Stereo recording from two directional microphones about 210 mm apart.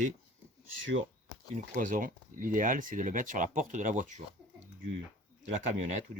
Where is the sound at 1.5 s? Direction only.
40° right (ahead or behind).